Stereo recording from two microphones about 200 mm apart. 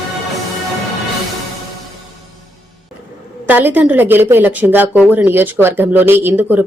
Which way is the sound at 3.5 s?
10° right (ahead or behind).